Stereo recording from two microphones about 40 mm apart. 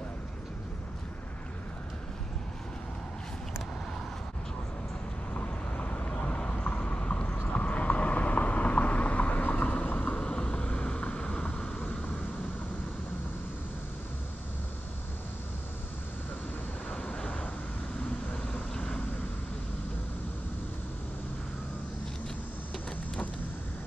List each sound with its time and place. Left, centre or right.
5.3 s vehicle: left
10.1 s vehicle: left
16.9 s vehicle: left